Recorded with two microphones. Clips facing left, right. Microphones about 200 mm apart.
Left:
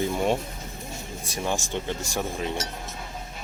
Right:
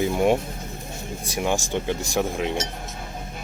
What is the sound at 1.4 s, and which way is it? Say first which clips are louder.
Speech: right 4 dB; 15° right (ahead or behind).